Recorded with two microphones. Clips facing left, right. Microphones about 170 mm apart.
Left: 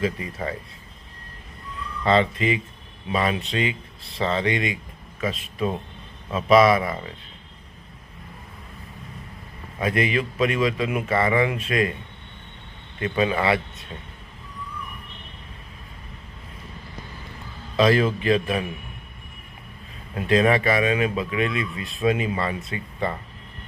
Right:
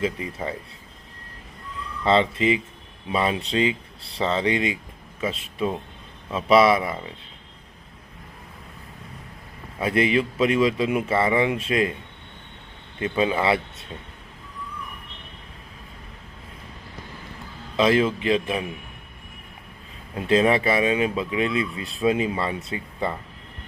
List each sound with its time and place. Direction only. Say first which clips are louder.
0.0 s speech: even; 25° right (ahead or behind)
2.0 s speech: right 1 dB; 25° right (ahead or behind)
9.8 s speech: right 2 dB; 30° right (ahead or behind)
13.0 s speech: even; 25° right (ahead or behind)
17.7 s speech: even; 20° right (ahead or behind)
20.1 s speech: even; 25° right (ahead or behind)